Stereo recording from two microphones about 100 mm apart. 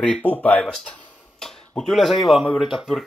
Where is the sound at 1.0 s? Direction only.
5° left (ahead or behind).